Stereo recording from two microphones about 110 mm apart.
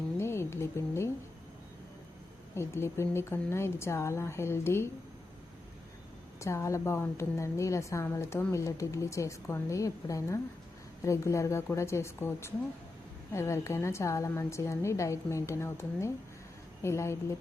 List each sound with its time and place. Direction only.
0.2 s a sound: 25° left (ahead or behind)
2.6 s a woman's voice: 25° left (ahead or behind)
6.4 s a woman's voice: 25° left (ahead or behind)